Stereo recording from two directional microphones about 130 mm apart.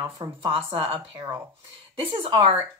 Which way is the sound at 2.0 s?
40° right (ahead or behind).